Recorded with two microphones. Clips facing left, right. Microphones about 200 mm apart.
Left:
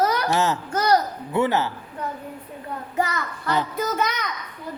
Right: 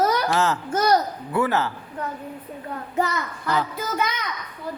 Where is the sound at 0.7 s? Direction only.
25° right (ahead or behind).